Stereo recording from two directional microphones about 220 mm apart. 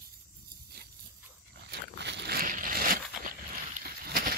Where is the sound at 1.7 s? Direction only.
50° right (ahead or behind).